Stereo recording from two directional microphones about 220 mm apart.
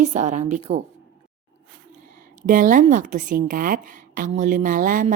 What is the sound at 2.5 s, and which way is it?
A woman's voice, 40° right (ahead or behind).